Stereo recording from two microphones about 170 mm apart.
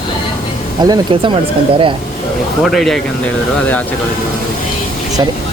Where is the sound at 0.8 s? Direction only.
30° right (ahead or behind).